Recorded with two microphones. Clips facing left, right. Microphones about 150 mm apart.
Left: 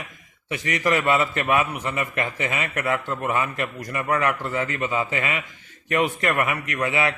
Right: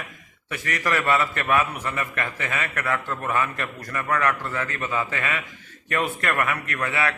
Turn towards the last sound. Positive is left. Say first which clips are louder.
# left 2 dB
turn(degrees=20)  # may be behind; listen again after turning